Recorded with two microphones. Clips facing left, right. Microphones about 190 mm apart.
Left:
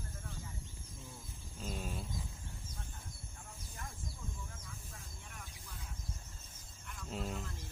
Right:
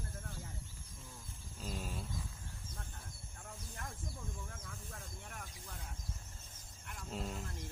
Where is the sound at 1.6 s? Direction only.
Centre (ahead or behind).